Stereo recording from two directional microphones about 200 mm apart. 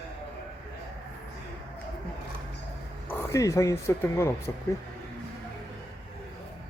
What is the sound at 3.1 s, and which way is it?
Speech, 15° left (ahead or behind).